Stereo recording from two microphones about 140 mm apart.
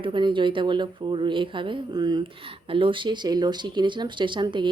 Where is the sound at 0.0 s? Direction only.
35° right (ahead or behind).